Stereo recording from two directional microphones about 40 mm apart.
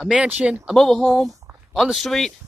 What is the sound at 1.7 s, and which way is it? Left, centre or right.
Speech, centre.